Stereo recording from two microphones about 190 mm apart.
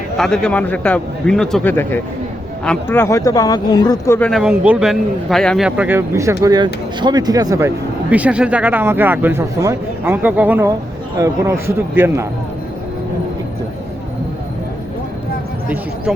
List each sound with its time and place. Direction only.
0.2 s a man's voice: 5° left (ahead or behind)
4.3 s a man's voice: centre (ahead or behind); by 7.7 s 20° right (ahead or behind)
8.1 s speech: 5° right (ahead or behind)
16.1 s speech: centre (ahead or behind)